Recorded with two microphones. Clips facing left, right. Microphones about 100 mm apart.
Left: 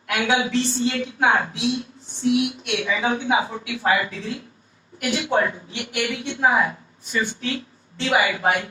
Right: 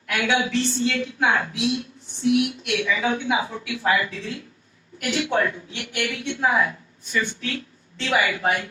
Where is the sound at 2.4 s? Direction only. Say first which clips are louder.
Even; 30° left (ahead or behind).